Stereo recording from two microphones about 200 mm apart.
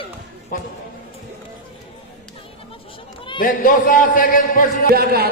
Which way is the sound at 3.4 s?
45° left (ahead or behind).